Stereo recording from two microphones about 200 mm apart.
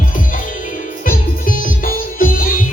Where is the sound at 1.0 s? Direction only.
45° left (ahead or behind).